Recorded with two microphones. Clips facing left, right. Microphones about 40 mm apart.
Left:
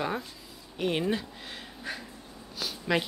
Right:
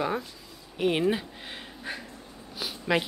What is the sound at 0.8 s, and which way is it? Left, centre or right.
Speech, centre.